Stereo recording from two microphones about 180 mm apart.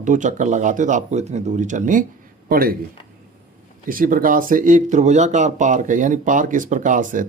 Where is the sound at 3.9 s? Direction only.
50° right (ahead or behind).